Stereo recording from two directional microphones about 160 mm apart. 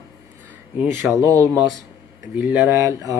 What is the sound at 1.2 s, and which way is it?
Speech, 20° right (ahead or behind).